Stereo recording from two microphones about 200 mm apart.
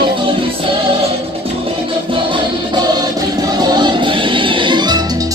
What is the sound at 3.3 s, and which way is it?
Music, 20° right (ahead or behind).